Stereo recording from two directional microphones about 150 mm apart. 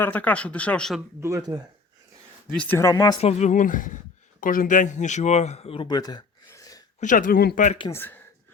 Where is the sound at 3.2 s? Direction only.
55° left (ahead or behind); by 6.2 s 30° left (ahead or behind).